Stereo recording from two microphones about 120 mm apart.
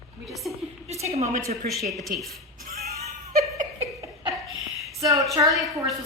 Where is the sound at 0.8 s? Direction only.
60° right (ahead or behind).